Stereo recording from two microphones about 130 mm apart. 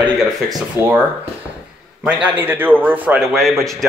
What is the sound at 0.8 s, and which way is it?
Speech, 15° right (ahead or behind).